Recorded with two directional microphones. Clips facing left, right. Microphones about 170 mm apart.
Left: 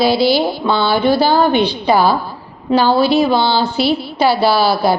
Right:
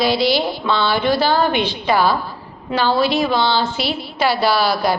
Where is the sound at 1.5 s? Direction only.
30° left (ahead or behind).